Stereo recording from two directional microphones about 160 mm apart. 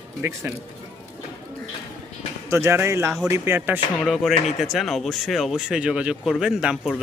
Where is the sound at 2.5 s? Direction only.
15° right (ahead or behind).